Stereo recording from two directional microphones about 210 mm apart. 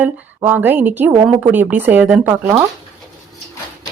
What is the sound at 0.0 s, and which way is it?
Speech, 10° right (ahead or behind).